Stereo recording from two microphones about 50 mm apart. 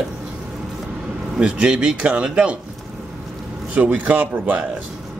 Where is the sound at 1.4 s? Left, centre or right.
Centre.